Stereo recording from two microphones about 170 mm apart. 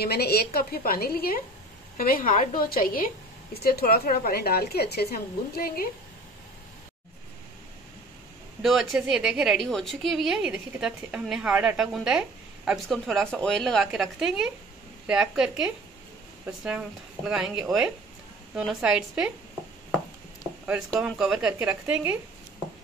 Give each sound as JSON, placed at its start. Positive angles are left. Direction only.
{"t": 0.0, "sound": "a woman's voice", "side_deg": 70}
{"t": 8.6, "sound": "a woman's voice", "side_deg": 0}
{"t": 21.0, "sound": "a woman's voice", "side_deg": -5}